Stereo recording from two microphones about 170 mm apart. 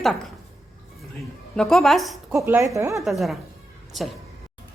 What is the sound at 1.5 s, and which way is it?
Speech, centre (ahead or behind).